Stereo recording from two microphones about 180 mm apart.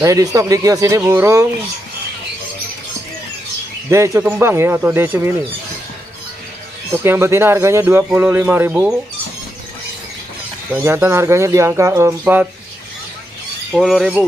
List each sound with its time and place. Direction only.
0.0 s speech: 20° right (ahead or behind)
3.9 s speech: 15° right (ahead or behind)
7.0 s speech: 15° right (ahead or behind)
10.7 s speech: 10° right (ahead or behind)
13.7 s speech: 5° right (ahead or behind)